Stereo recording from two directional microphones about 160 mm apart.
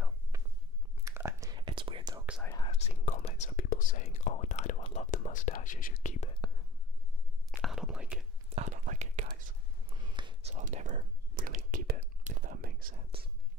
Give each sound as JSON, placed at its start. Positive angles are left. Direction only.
{"t": 1.0, "sound": "whispering", "side_deg": -20}
{"t": 2.6, "sound": "whispering", "side_deg": 40}
{"t": 7.6, "sound": "whispering", "side_deg": -5}
{"t": 8.5, "sound": "whispering", "side_deg": -50}
{"t": 9.8, "sound": "a sound", "side_deg": -35}
{"t": 10.5, "sound": "whispering", "side_deg": -50}